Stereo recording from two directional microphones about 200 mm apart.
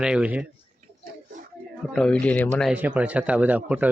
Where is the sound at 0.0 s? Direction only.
5° right (ahead or behind).